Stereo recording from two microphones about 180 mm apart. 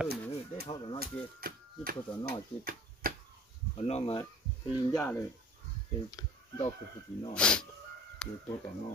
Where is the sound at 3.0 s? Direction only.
55° right (ahead or behind).